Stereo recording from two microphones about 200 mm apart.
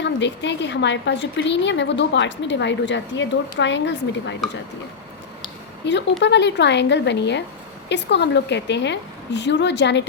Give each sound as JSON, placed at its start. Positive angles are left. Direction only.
{"t": 0.0, "sound": "a woman's voice", "side_deg": 60}
{"t": 5.8, "sound": "a woman's voice", "side_deg": 60}